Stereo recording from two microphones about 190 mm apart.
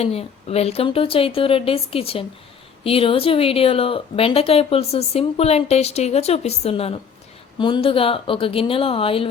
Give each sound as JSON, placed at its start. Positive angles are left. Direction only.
{"t": 0.0, "sound": "a woman's voice", "side_deg": 30}